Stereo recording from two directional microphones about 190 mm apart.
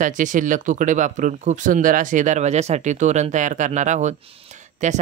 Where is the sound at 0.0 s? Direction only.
40° right (ahead or behind).